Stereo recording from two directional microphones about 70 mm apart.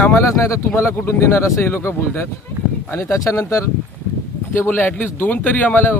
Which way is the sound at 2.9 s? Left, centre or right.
Left.